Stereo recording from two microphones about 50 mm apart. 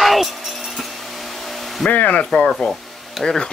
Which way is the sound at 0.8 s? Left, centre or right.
Centre.